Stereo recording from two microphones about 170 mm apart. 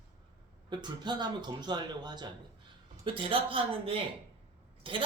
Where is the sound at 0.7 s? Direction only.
25° right (ahead or behind).